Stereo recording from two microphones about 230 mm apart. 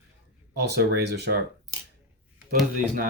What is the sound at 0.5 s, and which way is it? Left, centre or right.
Speech, right.